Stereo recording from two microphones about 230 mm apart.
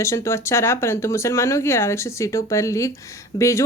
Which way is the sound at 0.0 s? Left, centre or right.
Centre.